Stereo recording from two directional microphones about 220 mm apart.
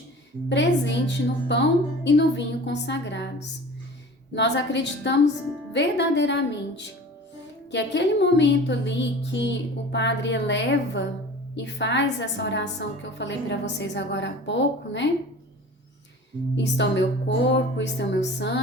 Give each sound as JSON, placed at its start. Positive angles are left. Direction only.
{"t": 0.4, "sound": "a woman's voice", "side_deg": 55}
{"t": 16.6, "sound": "a woman's voice", "side_deg": 55}